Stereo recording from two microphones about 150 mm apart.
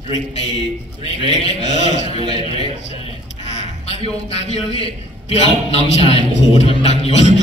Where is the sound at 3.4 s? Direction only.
45° left (ahead or behind).